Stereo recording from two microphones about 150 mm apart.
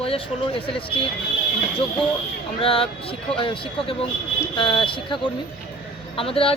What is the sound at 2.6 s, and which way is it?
A woman's voice, 40° left (ahead or behind).